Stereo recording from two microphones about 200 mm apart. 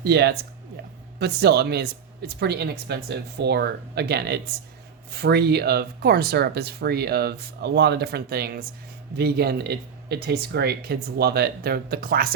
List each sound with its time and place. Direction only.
0.0 s speech: 55° right (ahead or behind)